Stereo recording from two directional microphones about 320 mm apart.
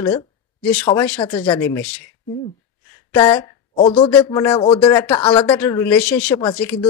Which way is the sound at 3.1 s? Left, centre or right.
Centre.